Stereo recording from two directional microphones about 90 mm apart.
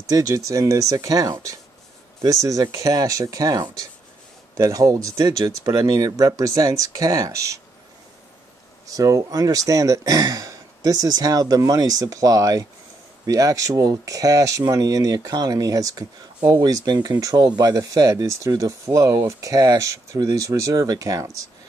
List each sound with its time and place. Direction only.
0.1 s speech: 40° right (ahead or behind)
8.8 s speech: 40° right (ahead or behind)